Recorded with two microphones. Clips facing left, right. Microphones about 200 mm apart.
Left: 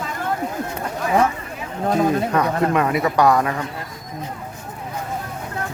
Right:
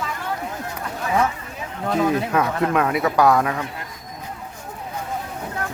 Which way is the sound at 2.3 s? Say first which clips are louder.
Left 1 dB; centre (ahead or behind).